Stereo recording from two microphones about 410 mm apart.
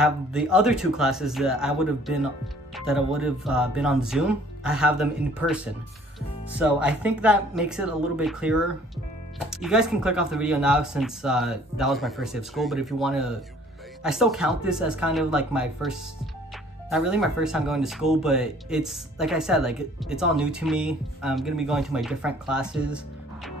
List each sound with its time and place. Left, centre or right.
0.0 s speech: centre
6.6 s speech: centre